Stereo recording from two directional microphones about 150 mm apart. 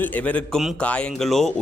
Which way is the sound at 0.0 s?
10° left (ahead or behind).